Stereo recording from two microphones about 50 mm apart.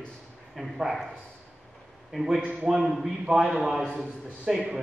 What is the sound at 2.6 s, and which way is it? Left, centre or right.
A man's voice, centre.